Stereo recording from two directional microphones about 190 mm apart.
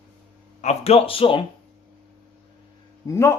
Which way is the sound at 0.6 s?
35° left (ahead or behind).